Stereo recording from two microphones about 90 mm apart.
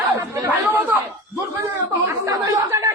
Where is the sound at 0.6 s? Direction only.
20° right (ahead or behind).